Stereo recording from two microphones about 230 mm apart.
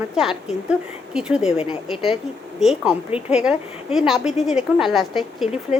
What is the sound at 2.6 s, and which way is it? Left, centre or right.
A woman's voice, centre.